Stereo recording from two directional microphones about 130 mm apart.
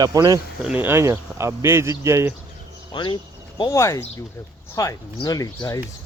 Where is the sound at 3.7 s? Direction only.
25° left (ahead or behind).